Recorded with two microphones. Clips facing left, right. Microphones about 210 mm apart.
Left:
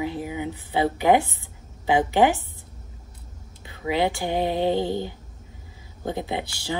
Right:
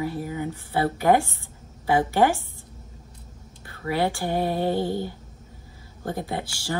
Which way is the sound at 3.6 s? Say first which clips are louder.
Left 1 dB; 15° left (ahead or behind).